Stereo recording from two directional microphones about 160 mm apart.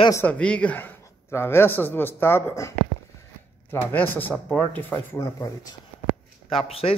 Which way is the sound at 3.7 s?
15° left (ahead or behind).